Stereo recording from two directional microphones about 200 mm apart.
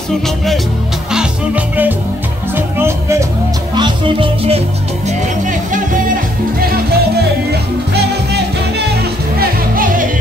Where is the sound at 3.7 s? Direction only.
25° right (ahead or behind); by 6.2 s 40° right (ahead or behind).